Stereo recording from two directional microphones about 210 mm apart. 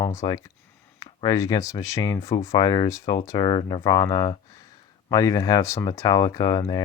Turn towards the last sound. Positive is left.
turn(degrees=20)  # may be behind; listen again after turning